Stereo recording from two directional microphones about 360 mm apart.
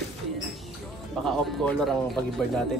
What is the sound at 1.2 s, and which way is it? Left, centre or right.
Speech, centre.